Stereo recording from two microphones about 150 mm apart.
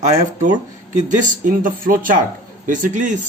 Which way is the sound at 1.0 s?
60° right (ahead or behind).